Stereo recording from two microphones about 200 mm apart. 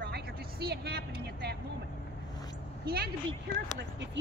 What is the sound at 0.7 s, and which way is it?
Speech, 50° right (ahead or behind).